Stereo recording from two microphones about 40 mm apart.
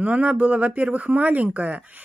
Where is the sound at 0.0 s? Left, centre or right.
Right.